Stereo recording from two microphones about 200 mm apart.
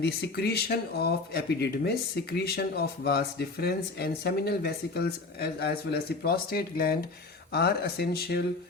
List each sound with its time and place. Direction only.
0.0 s speech: 55° left (ahead or behind)